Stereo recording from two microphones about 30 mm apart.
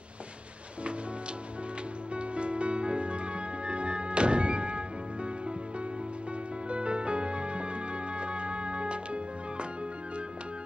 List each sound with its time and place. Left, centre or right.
2.1 s music: right
6.7 s music: right